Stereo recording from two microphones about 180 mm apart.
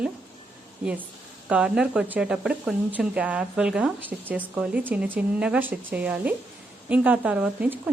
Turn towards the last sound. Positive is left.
turn(degrees=-5)  # may be behind; listen again after turning